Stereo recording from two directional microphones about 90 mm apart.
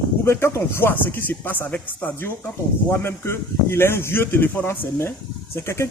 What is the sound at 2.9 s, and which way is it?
Speech, 25° left (ahead or behind).